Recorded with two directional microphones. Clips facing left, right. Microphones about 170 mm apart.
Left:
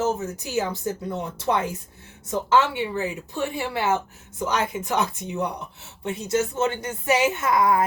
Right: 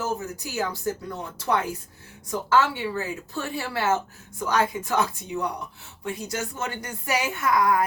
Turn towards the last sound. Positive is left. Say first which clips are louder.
# left 1 dB
turn(degrees=25)  # may be behind; listen again after turning